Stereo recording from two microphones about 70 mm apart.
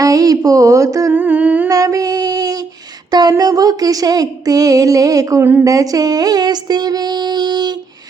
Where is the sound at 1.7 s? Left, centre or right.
Right.